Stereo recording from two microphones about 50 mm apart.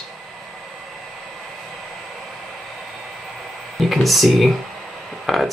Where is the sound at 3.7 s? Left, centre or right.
Centre.